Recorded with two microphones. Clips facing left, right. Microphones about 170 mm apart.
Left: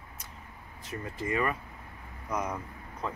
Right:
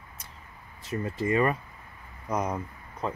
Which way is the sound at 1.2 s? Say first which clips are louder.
Right 5 dB; 30° right (ahead or behind).